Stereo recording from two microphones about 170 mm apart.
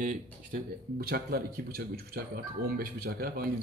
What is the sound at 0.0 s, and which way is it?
Speech, 50° right (ahead or behind).